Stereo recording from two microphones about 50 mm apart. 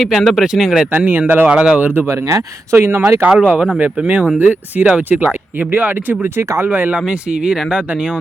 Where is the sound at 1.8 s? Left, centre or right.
Right.